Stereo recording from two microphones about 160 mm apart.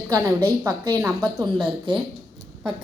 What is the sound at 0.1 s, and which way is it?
A woman's voice, 20° right (ahead or behind).